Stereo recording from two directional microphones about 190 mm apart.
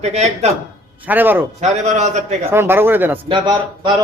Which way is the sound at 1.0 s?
10° right (ahead or behind).